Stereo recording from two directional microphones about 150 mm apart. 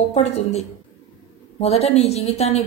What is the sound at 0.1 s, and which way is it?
Speech, 45° left (ahead or behind).